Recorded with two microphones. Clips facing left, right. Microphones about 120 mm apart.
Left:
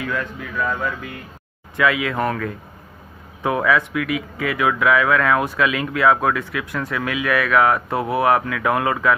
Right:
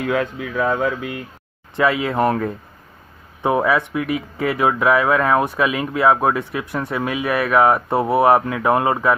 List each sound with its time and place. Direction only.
0.0 s speech: 65° right (ahead or behind)
1.8 s speech: 30° right (ahead or behind)